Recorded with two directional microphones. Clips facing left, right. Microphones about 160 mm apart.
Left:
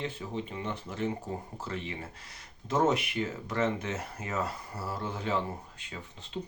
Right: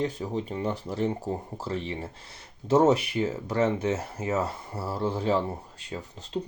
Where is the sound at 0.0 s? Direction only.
40° right (ahead or behind).